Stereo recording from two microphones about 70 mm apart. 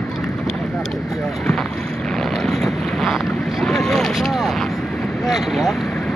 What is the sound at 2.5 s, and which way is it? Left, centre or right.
Boat, centre.